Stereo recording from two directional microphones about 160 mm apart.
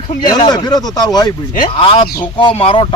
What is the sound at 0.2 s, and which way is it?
Speech, 25° left (ahead or behind).